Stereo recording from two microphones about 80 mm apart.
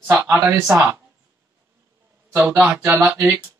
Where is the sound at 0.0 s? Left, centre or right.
Right.